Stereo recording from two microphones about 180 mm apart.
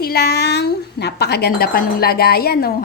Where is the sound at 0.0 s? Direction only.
60° left (ahead or behind).